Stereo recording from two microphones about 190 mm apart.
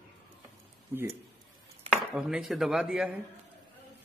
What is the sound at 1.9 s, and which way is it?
Chopping, 5° right (ahead or behind).